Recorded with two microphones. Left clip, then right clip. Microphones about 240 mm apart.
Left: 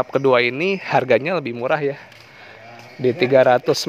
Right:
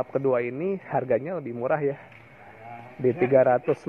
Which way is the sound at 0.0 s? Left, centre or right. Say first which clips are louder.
Left 8 dB; left.